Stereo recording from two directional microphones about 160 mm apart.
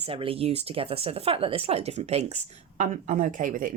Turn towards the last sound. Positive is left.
turn(degrees=-55)  # may be behind; listen again after turning